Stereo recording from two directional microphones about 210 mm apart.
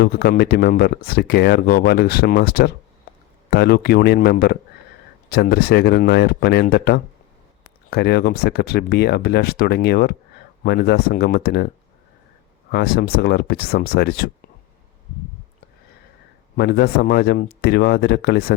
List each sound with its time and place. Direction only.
0.0 s speech: 50° left (ahead or behind)
12.7 s speech: 50° left (ahead or behind)
16.6 s speech: 50° left (ahead or behind)